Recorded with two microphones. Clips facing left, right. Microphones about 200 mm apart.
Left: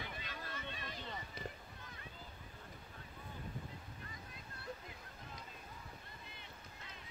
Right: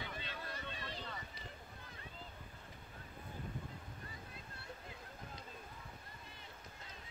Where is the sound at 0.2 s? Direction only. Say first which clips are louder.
Right 1 dB; 35° right (ahead or behind).